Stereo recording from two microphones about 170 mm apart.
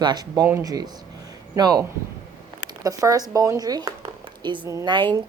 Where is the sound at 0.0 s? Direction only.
25° right (ahead or behind).